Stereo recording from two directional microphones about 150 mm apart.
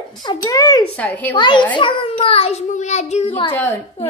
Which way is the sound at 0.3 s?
25° left (ahead or behind).